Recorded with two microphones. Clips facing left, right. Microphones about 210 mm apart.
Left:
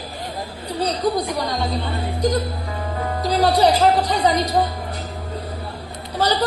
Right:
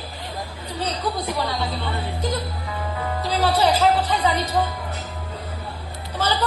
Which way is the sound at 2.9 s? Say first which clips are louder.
Left 5 dB; 45° left (ahead or behind).